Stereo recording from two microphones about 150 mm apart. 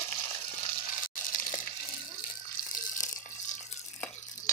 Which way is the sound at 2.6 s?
75° left (ahead or behind).